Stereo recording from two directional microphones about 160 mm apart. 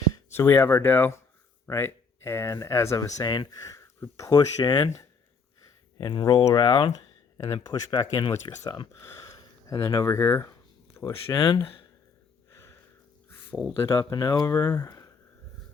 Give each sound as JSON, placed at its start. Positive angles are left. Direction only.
{"t": 0.3, "sound": "speech", "side_deg": 15}
{"t": 6.0, "sound": "speech", "side_deg": 30}
{"t": 12.5, "sound": "a sound", "side_deg": 15}
{"t": 13.8, "sound": "speech", "side_deg": 20}